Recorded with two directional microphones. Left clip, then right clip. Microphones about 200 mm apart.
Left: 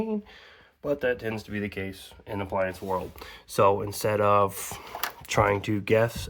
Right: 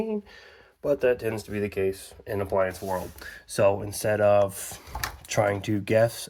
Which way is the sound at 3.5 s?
20° left (ahead or behind).